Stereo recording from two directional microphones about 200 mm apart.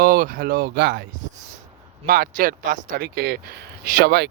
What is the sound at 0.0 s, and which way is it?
Speech, 45° right (ahead or behind).